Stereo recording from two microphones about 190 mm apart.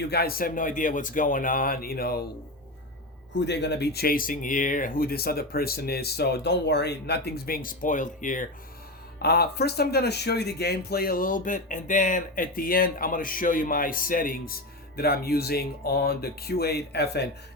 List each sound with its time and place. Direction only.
0.0 s speech: 55° left (ahead or behind)
3.4 s speech: 65° left (ahead or behind); by 8.4 s 45° left (ahead or behind)
9.1 s speech: 55° left (ahead or behind)